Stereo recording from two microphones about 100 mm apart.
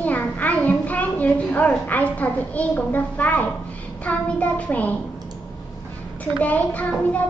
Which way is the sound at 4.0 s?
15° left (ahead or behind).